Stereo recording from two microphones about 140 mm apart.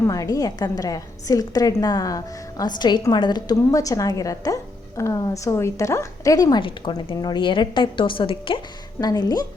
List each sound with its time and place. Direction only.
0.0 s a woman's voice: 25° left (ahead or behind)